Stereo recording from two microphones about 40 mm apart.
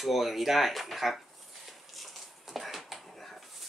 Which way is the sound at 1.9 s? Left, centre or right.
Centre.